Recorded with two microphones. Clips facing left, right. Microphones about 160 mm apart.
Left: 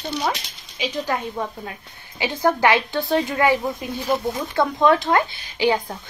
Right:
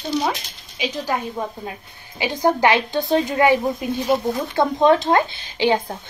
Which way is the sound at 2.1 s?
15° right (ahead or behind).